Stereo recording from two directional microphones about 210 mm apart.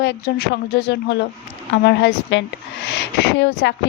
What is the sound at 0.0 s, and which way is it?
Speech, 50° left (ahead or behind).